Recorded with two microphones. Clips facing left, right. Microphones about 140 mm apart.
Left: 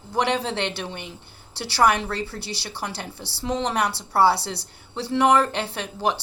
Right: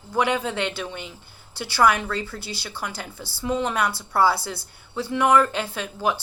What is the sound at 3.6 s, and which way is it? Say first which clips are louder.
Speech: left 2 dB; 35° left (ahead or behind).